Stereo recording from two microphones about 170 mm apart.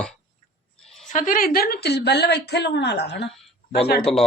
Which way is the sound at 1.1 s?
55° left (ahead or behind).